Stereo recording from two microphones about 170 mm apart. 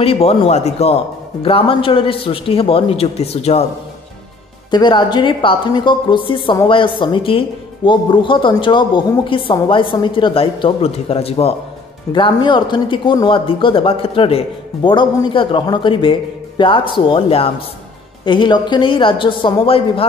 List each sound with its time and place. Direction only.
0.0 s a man's voice: 35° left (ahead or behind)
4.6 s speech: 25° left (ahead or behind)